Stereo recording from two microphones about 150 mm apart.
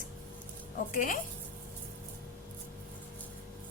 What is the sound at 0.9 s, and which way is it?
Speech, 60° left (ahead or behind).